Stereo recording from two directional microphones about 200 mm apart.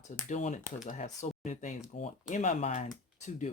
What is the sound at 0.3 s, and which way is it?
Speech, 40° left (ahead or behind).